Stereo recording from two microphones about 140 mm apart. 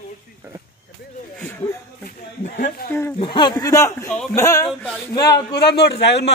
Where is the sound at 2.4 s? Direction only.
80° left.